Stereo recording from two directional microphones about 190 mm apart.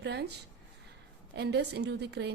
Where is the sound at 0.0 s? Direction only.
60° right (ahead or behind).